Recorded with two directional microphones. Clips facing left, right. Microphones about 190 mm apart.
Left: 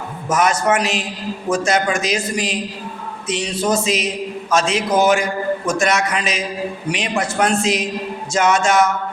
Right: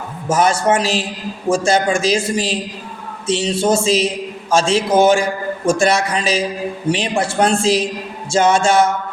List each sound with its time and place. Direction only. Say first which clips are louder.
0.3 s a man's voice: right 2 dB; 30° right (ahead or behind)